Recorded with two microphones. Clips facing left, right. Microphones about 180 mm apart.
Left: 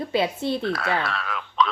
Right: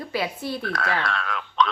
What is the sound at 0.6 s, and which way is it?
Speech, centre (ahead or behind).